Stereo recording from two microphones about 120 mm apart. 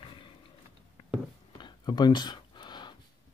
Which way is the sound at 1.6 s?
40° left (ahead or behind).